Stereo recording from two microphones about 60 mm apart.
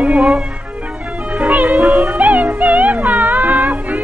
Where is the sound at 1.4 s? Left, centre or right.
Right.